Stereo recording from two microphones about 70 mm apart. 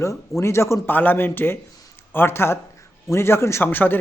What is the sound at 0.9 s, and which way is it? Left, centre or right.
A man's voice, left.